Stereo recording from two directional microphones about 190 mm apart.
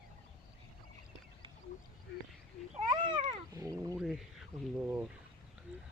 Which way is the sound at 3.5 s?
15° right (ahead or behind).